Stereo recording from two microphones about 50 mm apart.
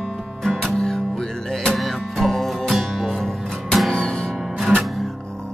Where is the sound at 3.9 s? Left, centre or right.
Centre.